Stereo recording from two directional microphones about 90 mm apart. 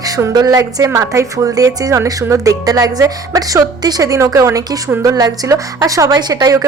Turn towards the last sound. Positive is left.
turn(degrees=-45)  # may be behind; listen again after turning